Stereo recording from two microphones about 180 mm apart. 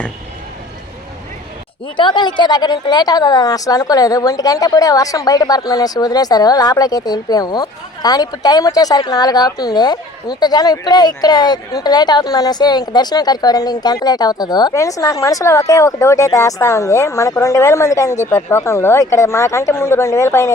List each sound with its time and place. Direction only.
2.0 s a woman's voice: 25° left (ahead or behind)